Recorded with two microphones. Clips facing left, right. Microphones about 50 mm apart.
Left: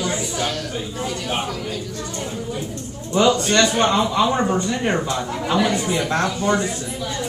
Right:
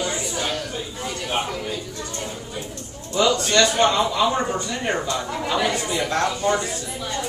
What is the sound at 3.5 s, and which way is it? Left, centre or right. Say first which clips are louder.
A man's voice: left 1 dB; left.